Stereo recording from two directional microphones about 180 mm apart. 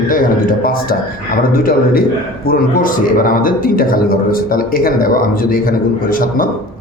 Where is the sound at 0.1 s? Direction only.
50° left (ahead or behind).